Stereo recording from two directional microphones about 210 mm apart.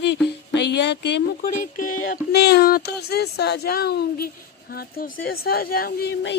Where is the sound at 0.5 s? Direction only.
55° left (ahead or behind).